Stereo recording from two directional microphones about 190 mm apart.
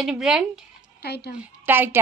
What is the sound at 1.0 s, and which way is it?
Speech, 60° left (ahead or behind).